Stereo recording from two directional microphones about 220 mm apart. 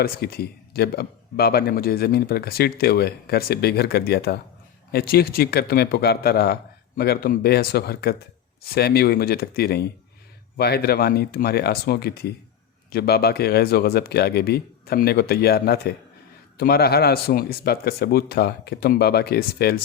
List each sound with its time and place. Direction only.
0.0 s a man's voice: 45° left (ahead or behind)